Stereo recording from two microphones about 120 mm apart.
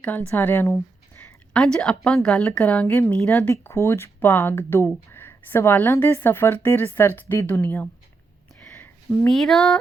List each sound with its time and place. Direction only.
0.0 s a woman's voice: 15° left (ahead or behind)
1.5 s a woman's voice: 5° left (ahead or behind)
3.5 s a woman's voice: 20° left (ahead or behind)
8.6 s a sound: 10° left (ahead or behind)